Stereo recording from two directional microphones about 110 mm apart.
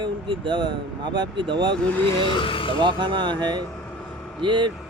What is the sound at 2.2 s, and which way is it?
Speech, 50° left (ahead or behind).